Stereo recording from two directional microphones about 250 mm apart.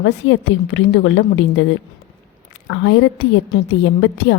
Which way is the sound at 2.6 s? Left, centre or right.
Left.